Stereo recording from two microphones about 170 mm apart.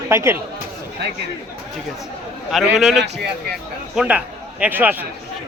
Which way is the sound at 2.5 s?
Centre (ahead or behind).